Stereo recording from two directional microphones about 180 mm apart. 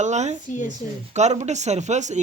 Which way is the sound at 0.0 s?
40° right (ahead or behind).